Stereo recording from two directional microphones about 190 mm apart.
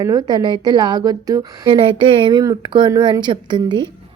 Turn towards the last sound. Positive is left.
turn(degrees=-25)  # may be behind; listen again after turning